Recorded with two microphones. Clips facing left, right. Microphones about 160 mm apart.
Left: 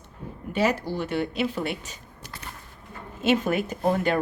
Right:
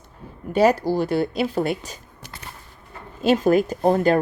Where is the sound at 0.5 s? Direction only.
40° right (ahead or behind).